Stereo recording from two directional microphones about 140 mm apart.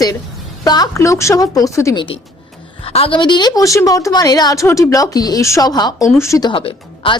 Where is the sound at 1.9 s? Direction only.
35° left (ahead or behind); by 6.5 s 20° left (ahead or behind).